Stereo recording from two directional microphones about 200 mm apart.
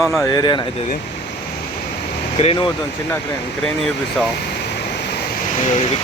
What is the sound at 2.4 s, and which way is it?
Speech, 30° left (ahead or behind).